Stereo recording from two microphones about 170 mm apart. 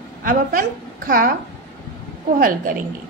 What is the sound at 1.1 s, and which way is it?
Speech, 55° right (ahead or behind).